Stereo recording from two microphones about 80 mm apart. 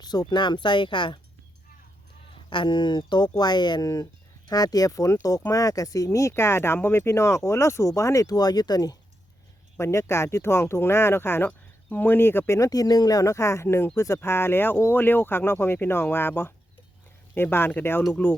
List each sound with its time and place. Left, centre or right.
0.0 s speech: left
2.5 s speech: left
4.4 s speech: left
9.7 s speech: left
12.5 s speech: left